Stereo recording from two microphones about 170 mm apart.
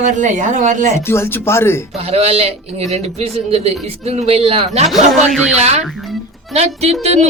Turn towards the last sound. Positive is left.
turn(degrees=-40)  # may be behind; listen again after turning